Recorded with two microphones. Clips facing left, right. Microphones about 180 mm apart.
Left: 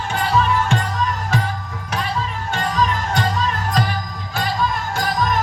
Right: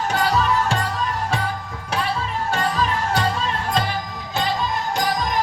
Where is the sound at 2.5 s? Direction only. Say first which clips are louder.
Left 2 dB; 35° right (ahead or behind).